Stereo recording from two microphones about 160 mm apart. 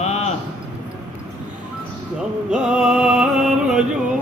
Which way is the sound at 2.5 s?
5° right (ahead or behind).